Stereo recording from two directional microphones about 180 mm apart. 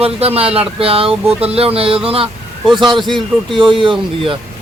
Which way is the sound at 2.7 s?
25° right (ahead or behind).